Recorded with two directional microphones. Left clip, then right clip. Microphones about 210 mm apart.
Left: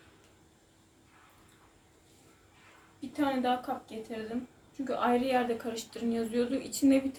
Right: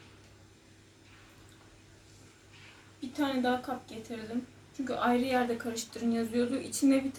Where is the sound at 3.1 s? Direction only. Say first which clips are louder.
Left 1 dB; 5° left (ahead or behind).